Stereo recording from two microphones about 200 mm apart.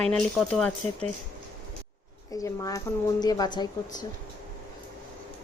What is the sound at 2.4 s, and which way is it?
Speech, 15° left (ahead or behind).